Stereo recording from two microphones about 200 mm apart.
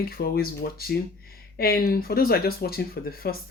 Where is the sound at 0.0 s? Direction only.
50° left (ahead or behind).